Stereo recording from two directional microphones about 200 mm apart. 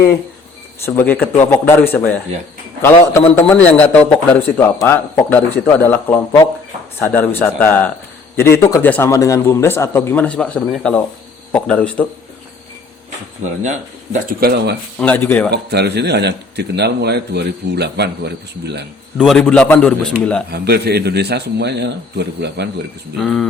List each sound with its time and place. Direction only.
0.8 s a man's voice: 10° left (ahead or behind)
13.6 s speech: 40° right (ahead or behind)
14.9 s a man's voice: 10° left (ahead or behind)
15.4 s a man's voice: 55° right (ahead or behind)
19.1 s a man's voice: centre (ahead or behind)
20.5 s a man's voice: 55° right (ahead or behind)
23.1 s a man's voice: centre (ahead or behind)